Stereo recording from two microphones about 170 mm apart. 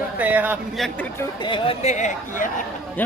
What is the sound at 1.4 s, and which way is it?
Speech, 30° left (ahead or behind).